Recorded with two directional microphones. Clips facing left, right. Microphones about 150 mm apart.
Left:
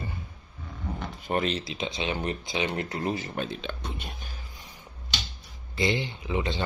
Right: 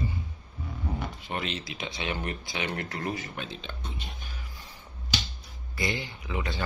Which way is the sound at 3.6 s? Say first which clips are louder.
Left 5 dB; 65° left (ahead or behind).